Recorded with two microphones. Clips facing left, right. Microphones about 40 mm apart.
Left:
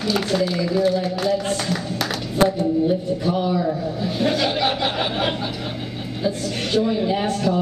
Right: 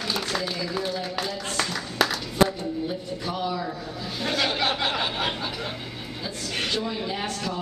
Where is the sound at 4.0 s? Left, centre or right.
Centre.